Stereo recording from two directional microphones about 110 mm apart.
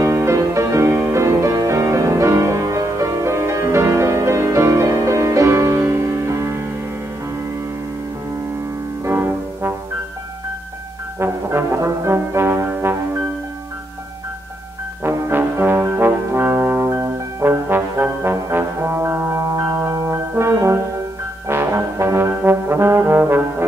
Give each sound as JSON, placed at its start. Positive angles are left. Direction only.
{"t": 0.0, "sound": "music", "side_deg": -25}
{"t": 9.0, "sound": "music", "side_deg": -20}
{"t": 11.1, "sound": "brass instrument", "side_deg": -20}
{"t": 15.0, "sound": "brass instrument", "side_deg": -20}
{"t": 21.5, "sound": "trombone", "side_deg": -20}